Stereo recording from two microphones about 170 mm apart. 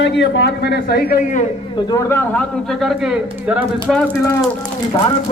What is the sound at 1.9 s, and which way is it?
Speech, 15° left (ahead or behind).